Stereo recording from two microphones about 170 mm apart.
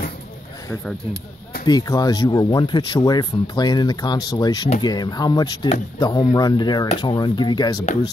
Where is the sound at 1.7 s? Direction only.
25° left (ahead or behind).